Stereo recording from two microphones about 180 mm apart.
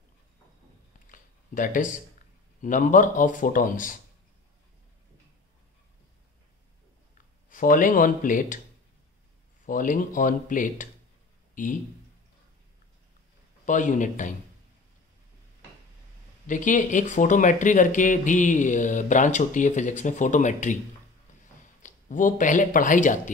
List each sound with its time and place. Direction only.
1.1 s a sound: 50° left (ahead or behind)
2.6 s speech: 45° left (ahead or behind)
7.4 s speech: 50° left (ahead or behind)
9.7 s speech: 50° left (ahead or behind)
13.7 s speech: 45° left (ahead or behind)
16.4 s speech: 45° left (ahead or behind)
21.8 s speech: 45° left (ahead or behind)